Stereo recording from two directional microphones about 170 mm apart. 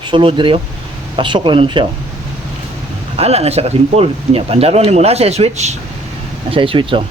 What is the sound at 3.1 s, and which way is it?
Speech, 40° right (ahead or behind).